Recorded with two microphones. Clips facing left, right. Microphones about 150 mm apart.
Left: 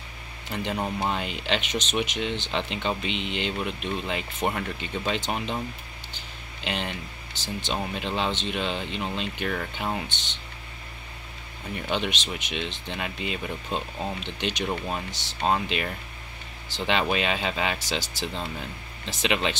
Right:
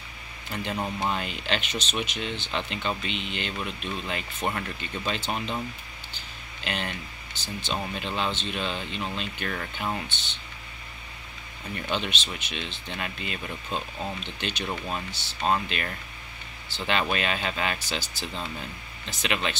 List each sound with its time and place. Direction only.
0.5 s speech: 20° left (ahead or behind)
6.6 s speech: 20° left (ahead or behind)
11.7 s speech: 15° left (ahead or behind)
19.2 s speech: 20° left (ahead or behind)